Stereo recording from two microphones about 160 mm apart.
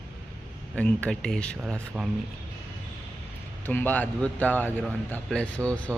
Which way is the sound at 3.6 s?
10° left (ahead or behind).